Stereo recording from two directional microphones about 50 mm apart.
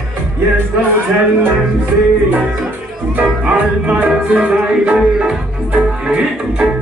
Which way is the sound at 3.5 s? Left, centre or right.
Right.